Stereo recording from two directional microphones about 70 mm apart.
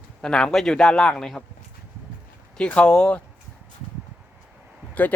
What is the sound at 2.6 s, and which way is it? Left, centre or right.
Speech, centre.